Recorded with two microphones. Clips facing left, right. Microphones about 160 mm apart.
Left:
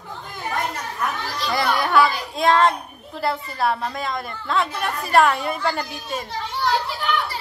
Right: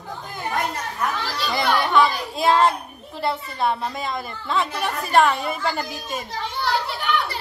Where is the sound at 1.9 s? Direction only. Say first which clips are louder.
Even; centre (ahead or behind).